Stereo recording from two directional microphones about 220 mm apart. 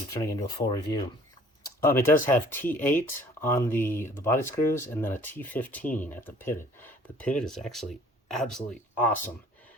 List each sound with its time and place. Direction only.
0.1 s speech: 15° left (ahead or behind)
1.8 s speech: 10° left (ahead or behind)